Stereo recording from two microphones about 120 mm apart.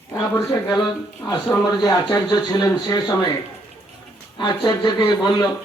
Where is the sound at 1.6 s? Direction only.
35° left (ahead or behind).